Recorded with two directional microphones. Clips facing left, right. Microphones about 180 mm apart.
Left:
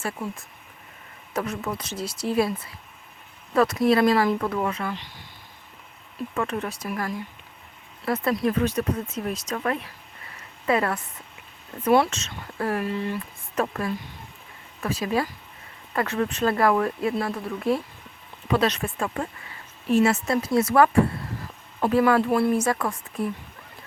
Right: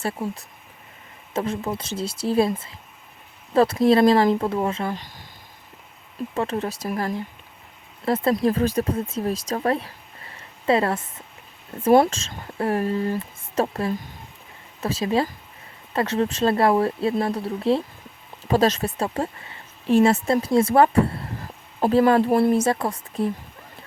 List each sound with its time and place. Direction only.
0.0 s speech: 30° right (ahead or behind)
3.5 s speech: 30° right (ahead or behind)
6.3 s speech: 35° right (ahead or behind)
10.3 s a sound: 30° right (ahead or behind)
11.9 s speech: 35° right (ahead or behind)
12.8 s speech: 40° right (ahead or behind)
13.1 s speech: 25° right (ahead or behind)
18.4 s speech: 40° right (ahead or behind)